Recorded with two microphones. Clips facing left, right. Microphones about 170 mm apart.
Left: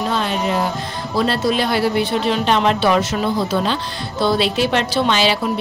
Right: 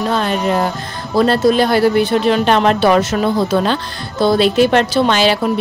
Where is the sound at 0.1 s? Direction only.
50° right (ahead or behind).